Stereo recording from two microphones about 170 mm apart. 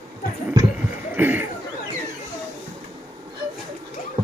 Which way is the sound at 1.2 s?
10° right (ahead or behind).